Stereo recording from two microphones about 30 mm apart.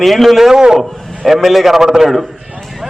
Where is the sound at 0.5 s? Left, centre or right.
Right.